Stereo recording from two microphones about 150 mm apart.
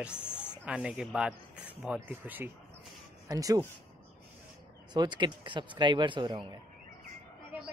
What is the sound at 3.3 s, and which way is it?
Speech, 25° right (ahead or behind).